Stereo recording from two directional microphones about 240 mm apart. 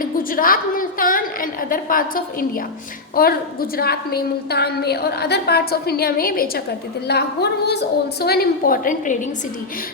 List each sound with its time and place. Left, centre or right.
0.0 s a woman's voice: left